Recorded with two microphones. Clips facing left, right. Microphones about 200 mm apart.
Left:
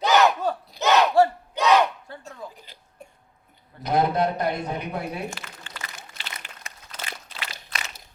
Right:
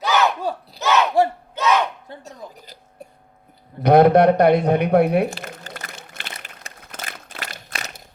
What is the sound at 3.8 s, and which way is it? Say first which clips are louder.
A man's voice: right 10 dB; 65° right (ahead or behind).